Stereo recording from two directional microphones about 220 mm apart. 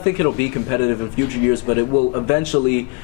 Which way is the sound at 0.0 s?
15° left (ahead or behind).